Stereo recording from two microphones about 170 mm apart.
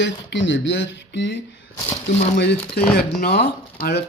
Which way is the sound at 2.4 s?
80° left.